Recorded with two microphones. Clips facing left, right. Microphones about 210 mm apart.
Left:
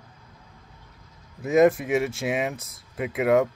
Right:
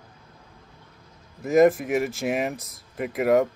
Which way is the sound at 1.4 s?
Centre (ahead or behind).